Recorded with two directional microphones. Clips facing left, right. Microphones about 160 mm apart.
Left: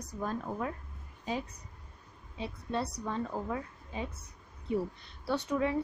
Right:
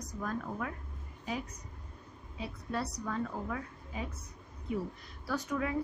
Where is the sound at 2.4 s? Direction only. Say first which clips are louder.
Left 2 dB; 25° left (ahead or behind).